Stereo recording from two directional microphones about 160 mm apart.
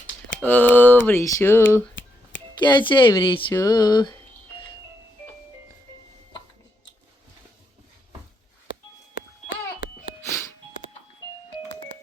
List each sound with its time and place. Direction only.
0.3 s speech: 10° left (ahead or behind)
2.6 s speech: 30° left (ahead or behind)
3.5 s music: 20° left (ahead or behind)